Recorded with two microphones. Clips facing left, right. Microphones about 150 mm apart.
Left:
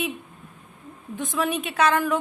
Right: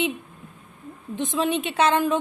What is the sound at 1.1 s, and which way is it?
A woman's voice, 20° right (ahead or behind).